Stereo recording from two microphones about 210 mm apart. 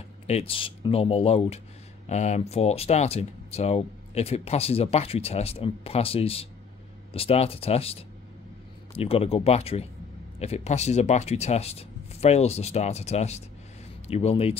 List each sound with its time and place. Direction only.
0.3 s speech: 25° left (ahead or behind)